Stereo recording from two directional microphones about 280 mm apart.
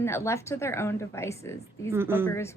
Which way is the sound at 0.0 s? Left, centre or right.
Centre.